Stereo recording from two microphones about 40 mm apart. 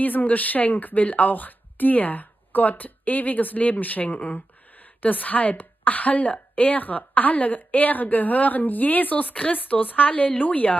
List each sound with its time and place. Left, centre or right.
0.0 s a woman's voice: left